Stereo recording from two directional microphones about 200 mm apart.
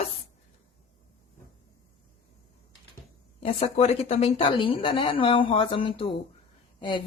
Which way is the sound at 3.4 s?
30° left (ahead or behind).